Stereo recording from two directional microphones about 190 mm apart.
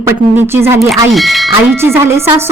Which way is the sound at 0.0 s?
10° right (ahead or behind).